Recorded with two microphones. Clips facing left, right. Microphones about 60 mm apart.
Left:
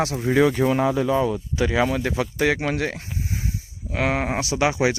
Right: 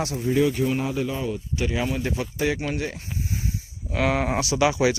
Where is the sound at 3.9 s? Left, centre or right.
Left.